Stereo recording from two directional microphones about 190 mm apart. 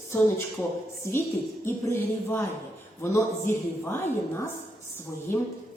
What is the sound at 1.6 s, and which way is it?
A woman's voice, 10° left (ahead or behind).